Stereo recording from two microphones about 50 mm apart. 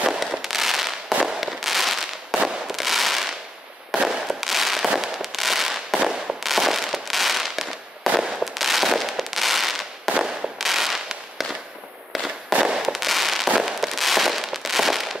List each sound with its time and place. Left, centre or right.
0.2 s fireworks: centre
12.5 s fireworks: centre
12.8 s fireworks: centre